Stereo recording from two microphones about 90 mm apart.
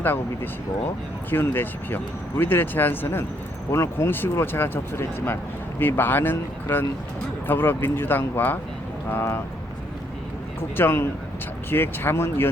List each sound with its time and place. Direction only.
1.3 s speech: 25° left (ahead or behind)
10.8 s speech: 25° left (ahead or behind)